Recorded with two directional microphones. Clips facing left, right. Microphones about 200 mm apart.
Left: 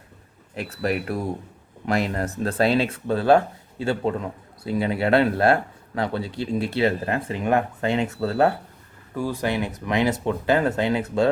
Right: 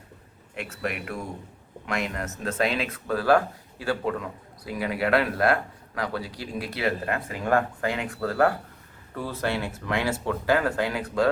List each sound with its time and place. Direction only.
0.5 s speech: 35° left (ahead or behind)
9.1 s speech: 15° left (ahead or behind)